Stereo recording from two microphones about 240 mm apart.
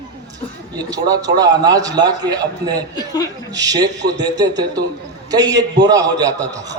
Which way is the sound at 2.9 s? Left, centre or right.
Centre.